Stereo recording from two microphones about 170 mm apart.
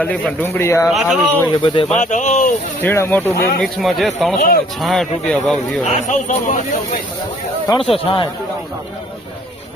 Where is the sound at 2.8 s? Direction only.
10° left (ahead or behind).